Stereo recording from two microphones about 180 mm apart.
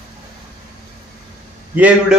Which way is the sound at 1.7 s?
5° right (ahead or behind).